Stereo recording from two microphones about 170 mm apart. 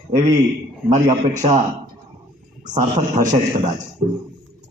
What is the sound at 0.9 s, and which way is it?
Speech, 40° right (ahead or behind).